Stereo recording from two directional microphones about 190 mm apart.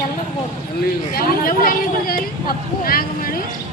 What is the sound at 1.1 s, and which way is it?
Speech, 50° left (ahead or behind).